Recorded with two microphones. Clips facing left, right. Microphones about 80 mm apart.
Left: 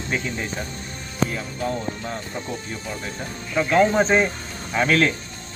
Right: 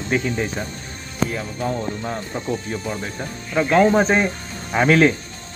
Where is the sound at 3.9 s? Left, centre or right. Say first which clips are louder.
Right 2 dB; centre.